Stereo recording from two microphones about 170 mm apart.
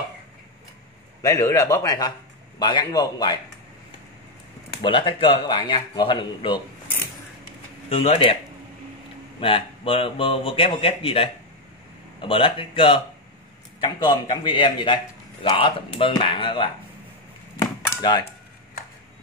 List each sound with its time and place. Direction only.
1.2 s speech: 20° left (ahead or behind)
4.8 s speech: 30° left (ahead or behind)
7.9 s speech: 35° left (ahead or behind)
9.4 s speech: 30° left (ahead or behind)